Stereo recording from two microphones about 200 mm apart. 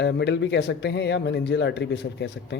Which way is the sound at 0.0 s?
60° left (ahead or behind).